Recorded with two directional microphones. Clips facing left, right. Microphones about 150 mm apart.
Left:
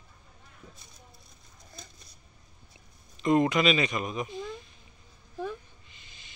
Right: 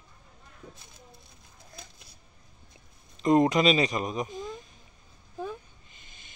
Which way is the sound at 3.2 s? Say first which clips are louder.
Right 2 dB; 35° right (ahead or behind).